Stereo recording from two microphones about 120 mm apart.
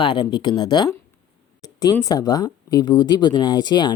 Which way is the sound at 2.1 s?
30° left (ahead or behind).